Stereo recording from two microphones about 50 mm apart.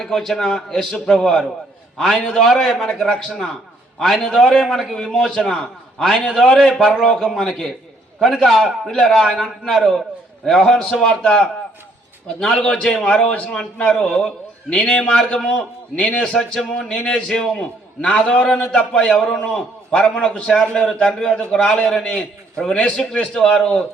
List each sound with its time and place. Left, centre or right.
0.0 s a man's voice: centre
8.9 s a man's voice: centre
12.5 s a man's voice: centre